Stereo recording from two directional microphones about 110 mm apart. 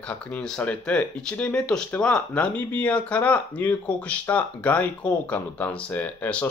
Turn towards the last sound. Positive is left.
turn(degrees=15)  # may be behind; listen again after turning